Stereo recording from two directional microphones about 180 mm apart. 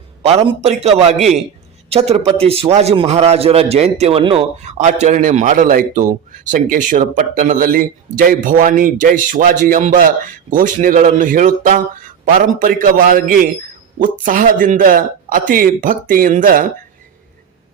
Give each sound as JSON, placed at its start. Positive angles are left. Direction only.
{"t": 0.3, "sound": "a man's voice", "side_deg": -35}